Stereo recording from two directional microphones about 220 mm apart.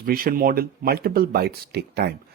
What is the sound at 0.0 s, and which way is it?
Speech, 40° right (ahead or behind).